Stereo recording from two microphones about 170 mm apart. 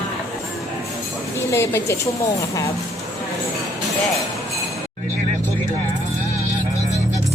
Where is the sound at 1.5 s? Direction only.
15° left (ahead or behind).